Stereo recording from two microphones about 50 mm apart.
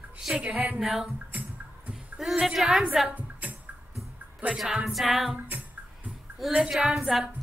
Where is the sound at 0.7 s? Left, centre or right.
Centre.